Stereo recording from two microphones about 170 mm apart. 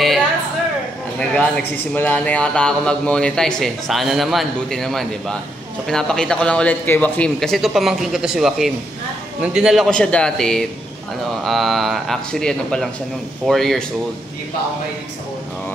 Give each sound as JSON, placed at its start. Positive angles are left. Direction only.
{"t": 1.3, "sound": "a man's voice", "side_deg": 10}